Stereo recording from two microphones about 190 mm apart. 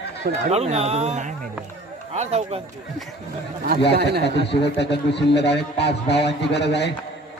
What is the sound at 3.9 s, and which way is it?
Speech, 60° right (ahead or behind).